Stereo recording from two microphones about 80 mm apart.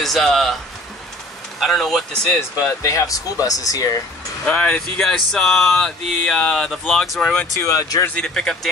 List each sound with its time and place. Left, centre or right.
0.0 s speech: centre
1.6 s speech: centre
2.8 s speech: left
4.5 s speech: centre
7.5 s speech: left
8.2 s speech: centre